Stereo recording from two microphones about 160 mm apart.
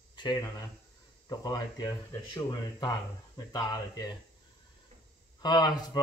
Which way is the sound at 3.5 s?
25° left (ahead or behind).